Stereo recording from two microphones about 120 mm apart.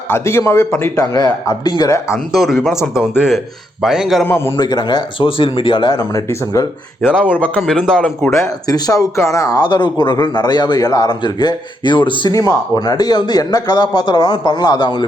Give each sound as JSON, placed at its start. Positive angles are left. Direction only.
{"t": 0.1, "sound": "speech", "side_deg": 20}
{"t": 0.9, "sound": "speech", "side_deg": 30}
{"t": 2.1, "sound": "a man's voice", "side_deg": 0}
{"t": 2.9, "sound": "a man's voice", "side_deg": -5}
{"t": 4.2, "sound": "a man's voice", "side_deg": 15}
{"t": 4.5, "sound": "speech", "side_deg": 35}
{"t": 6.0, "sound": "speech", "side_deg": 30}
{"t": 7.6, "sound": "a man's voice", "side_deg": 5}
{"t": 8.3, "sound": "speech", "side_deg": 30}
{"t": 12.3, "sound": "speech", "side_deg": 30}